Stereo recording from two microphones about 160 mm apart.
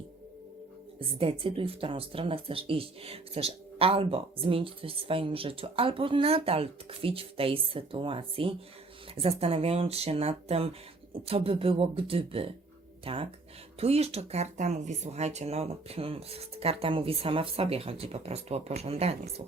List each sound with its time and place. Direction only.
0.9 s speech: 35° right (ahead or behind)